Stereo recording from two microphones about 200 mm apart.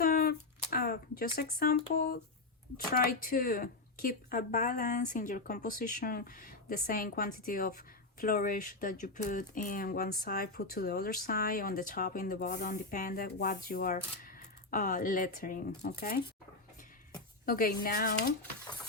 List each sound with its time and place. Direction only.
0.0 s a sound: 50° left (ahead or behind)
0.7 s speech: 50° left (ahead or behind)
17.4 s speech: 45° left (ahead or behind)